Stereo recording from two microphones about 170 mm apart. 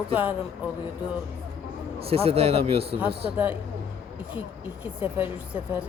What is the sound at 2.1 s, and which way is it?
Speech, 35° right (ahead or behind).